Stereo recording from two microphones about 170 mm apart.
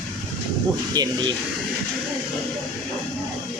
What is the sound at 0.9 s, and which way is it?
Speech, 20° right (ahead or behind).